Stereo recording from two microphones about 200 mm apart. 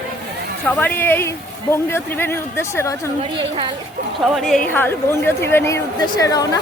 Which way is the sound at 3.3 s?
25° right (ahead or behind).